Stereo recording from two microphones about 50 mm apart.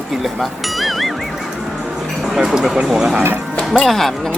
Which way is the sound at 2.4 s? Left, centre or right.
Centre.